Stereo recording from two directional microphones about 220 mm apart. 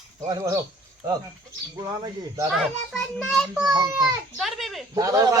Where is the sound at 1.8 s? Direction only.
20° right (ahead or behind).